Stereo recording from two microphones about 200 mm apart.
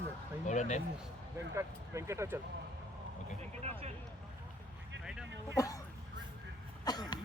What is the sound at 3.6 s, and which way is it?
Speech, 30° right (ahead or behind).